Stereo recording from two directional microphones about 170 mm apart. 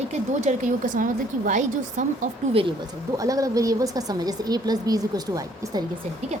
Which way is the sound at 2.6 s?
25° right (ahead or behind).